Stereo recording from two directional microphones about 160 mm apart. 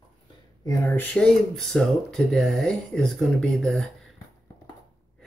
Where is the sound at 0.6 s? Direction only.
20° left (ahead or behind).